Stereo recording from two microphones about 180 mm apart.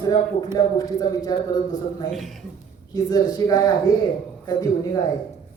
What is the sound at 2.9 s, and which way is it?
Speech, 20° left (ahead or behind).